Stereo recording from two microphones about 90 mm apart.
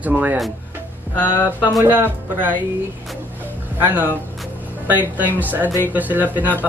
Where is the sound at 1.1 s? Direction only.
20° left (ahead or behind).